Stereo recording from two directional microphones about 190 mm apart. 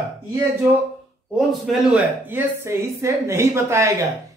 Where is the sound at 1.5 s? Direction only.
Centre (ahead or behind).